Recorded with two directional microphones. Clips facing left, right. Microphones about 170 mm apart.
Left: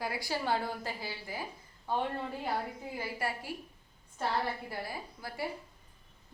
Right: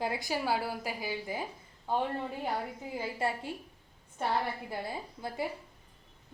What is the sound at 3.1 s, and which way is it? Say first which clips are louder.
Speech: right 5 dB; 25° right (ahead or behind).